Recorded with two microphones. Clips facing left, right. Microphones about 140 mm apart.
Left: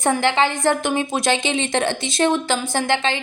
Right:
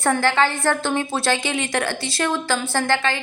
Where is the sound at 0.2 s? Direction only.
20° left (ahead or behind).